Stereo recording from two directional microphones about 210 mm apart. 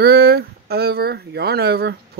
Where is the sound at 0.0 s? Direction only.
50° right (ahead or behind).